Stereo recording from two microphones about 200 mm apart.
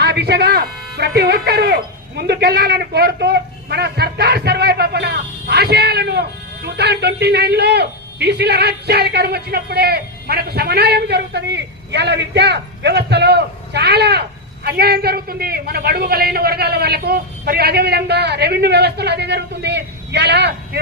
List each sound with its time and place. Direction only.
0.0 s speech: 55° right (ahead or behind)